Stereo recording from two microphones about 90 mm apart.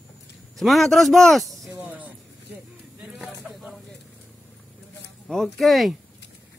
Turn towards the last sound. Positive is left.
turn(degrees=0)  # may be behind; listen again after turning